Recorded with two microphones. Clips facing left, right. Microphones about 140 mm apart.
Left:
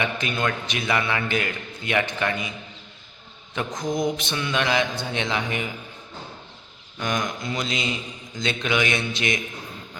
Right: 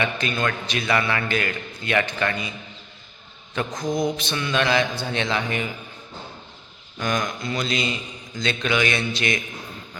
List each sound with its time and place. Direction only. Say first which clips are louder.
0.0 s a man's voice: right 1 dB; 15° left (ahead or behind)
4.0 s a man's voice: right 1 dB; 20° left (ahead or behind)
7.0 s a man's voice: right 1 dB; 20° left (ahead or behind)